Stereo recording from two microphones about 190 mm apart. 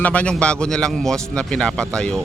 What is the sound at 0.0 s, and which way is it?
Speech, 5° left (ahead or behind).